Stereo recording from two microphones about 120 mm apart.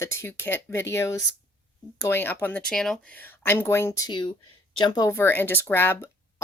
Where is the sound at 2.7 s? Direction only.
5° left (ahead or behind).